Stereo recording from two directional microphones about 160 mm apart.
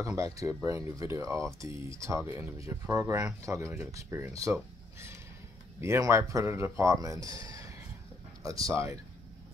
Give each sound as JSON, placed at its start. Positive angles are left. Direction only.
{"t": 0.0, "sound": "speech", "side_deg": -20}
{"t": 5.8, "sound": "speech", "side_deg": -15}